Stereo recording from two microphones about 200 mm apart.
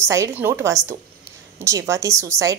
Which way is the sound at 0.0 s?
15° right (ahead or behind).